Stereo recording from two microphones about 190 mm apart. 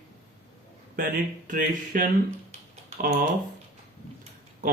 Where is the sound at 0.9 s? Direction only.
45° right (ahead or behind).